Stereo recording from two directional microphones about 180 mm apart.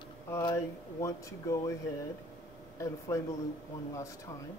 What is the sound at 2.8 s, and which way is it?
Speech, 15° left (ahead or behind).